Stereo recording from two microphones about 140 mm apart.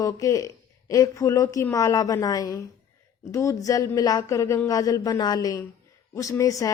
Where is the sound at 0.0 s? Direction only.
25° left (ahead or behind).